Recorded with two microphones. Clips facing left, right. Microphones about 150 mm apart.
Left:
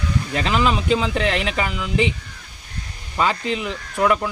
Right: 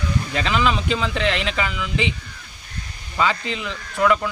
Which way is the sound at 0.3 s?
40° left (ahead or behind).